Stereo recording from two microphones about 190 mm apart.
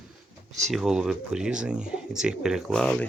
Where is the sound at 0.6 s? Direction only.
Centre (ahead or behind).